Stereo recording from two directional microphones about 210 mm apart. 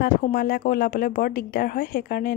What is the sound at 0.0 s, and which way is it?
Speech, 45° left (ahead or behind).